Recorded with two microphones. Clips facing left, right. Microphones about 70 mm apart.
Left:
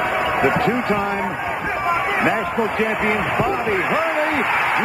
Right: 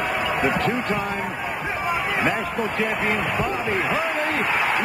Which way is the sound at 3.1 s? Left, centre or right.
Centre.